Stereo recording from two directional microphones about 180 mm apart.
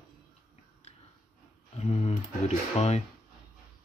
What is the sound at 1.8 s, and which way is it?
Typing, 35° left (ahead or behind).